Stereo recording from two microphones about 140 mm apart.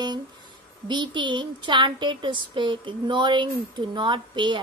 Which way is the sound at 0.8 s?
35° right (ahead or behind).